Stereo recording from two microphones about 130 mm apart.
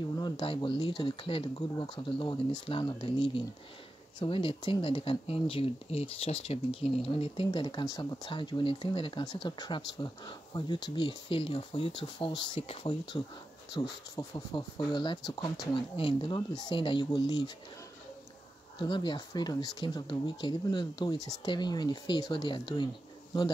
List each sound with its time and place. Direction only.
0.2 s speech: 40° left (ahead or behind)
14.1 s speech: 30° left (ahead or behind)
18.8 s speech: 40° left (ahead or behind)